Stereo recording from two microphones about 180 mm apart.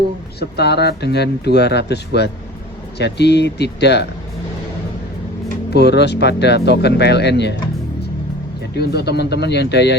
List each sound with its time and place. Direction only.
0.3 s speech: 65° left (ahead or behind)
5.7 s speech: 70° left (ahead or behind)
8.7 s speech: 65° left (ahead or behind)